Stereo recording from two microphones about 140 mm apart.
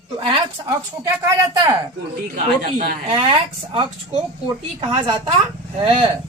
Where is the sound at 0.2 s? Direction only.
35° right (ahead or behind).